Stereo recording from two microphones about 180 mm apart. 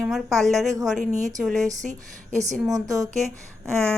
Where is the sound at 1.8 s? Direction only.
40° right (ahead or behind).